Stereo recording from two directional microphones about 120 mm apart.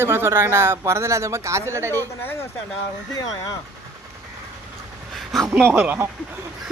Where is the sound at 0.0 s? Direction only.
20° right (ahead or behind).